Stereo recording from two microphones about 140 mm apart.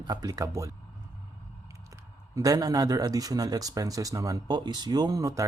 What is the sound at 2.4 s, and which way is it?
Speech, 30° right (ahead or behind).